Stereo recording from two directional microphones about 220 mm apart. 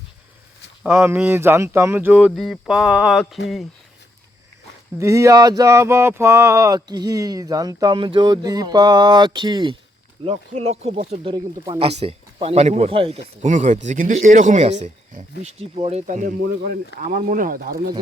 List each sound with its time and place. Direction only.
0.8 s speech: 10° right (ahead or behind)
4.9 s speech: 15° right (ahead or behind); by 17.8 s 40° right (ahead or behind)